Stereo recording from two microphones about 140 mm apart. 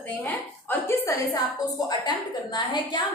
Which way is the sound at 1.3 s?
30° left (ahead or behind).